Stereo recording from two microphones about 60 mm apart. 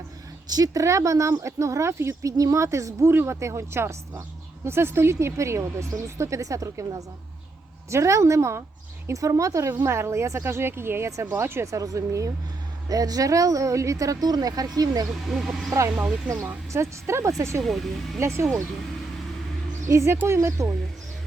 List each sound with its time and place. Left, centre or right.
0.4 s a woman's voice: right
7.9 s a woman's voice: right
9.1 s speech: right
9.8 s a woman's voice: right
11.6 s speech: right
12.9 s speech: right
15.3 s speech: centre
16.0 s speech: centre
16.7 s a woman's voice: right
17.6 s speech: centre
18.2 s a woman's voice: right
19.9 s a woman's voice: right